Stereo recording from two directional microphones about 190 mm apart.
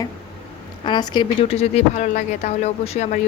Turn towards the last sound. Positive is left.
turn(degrees=35)  # may be behind; listen again after turning